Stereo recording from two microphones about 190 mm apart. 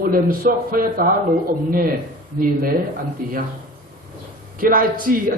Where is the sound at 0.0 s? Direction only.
50° right (ahead or behind).